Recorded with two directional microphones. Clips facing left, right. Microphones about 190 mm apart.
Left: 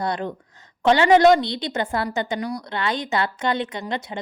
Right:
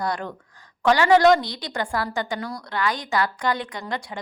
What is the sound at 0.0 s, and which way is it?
A woman's voice, 20° left (ahead or behind).